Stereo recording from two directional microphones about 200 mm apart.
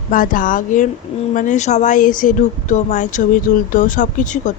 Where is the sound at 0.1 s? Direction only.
45° left (ahead or behind).